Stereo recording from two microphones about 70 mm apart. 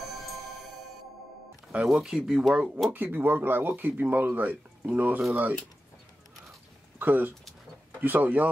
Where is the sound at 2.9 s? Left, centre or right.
Right.